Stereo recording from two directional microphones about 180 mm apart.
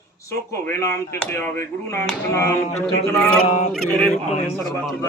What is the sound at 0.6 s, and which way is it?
Speech, 15° left (ahead or behind).